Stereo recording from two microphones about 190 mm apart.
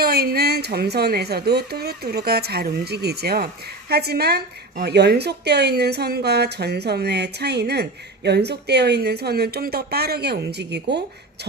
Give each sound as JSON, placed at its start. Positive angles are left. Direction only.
{"t": 0.0, "sound": "speech", "side_deg": -55}